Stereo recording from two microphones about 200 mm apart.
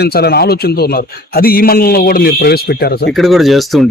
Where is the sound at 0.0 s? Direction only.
50° left (ahead or behind).